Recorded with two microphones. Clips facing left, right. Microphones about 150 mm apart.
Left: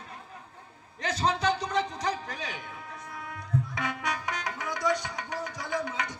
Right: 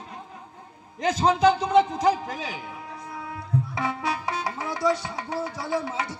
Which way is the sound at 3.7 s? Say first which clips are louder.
Right 5 dB; 30° right (ahead or behind).